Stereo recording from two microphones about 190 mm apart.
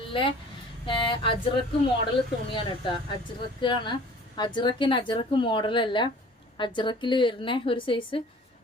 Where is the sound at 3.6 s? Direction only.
25° left (ahead or behind).